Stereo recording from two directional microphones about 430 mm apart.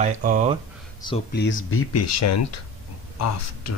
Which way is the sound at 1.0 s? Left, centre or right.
Centre.